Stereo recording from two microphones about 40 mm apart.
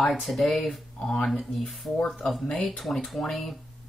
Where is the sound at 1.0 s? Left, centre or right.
Centre.